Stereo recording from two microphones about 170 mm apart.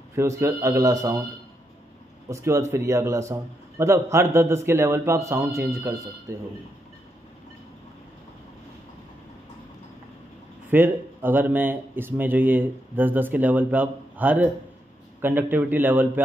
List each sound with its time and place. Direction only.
0.1 s a man's voice: 15° right (ahead or behind)
2.2 s speech: 15° right (ahead or behind)
10.7 s speech: 10° right (ahead or behind)